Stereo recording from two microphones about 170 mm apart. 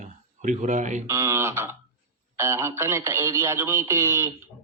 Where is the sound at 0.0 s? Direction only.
45° right (ahead or behind).